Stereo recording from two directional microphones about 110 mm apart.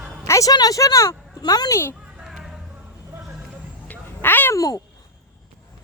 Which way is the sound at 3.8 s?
15° left (ahead or behind).